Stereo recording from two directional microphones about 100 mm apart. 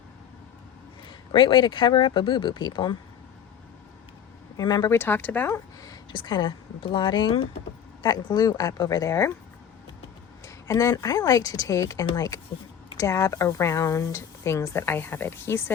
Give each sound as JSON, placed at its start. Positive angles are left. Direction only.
{"t": 1.0, "sound": "speech", "side_deg": 55}
{"t": 4.5, "sound": "speech", "side_deg": 45}
{"t": 4.9, "sound": "speech", "side_deg": 20}
{"t": 5.5, "sound": "a woman's voice", "side_deg": 30}
{"t": 10.4, "sound": "a sound", "side_deg": 30}
{"t": 10.9, "sound": "a woman's voice", "side_deg": 40}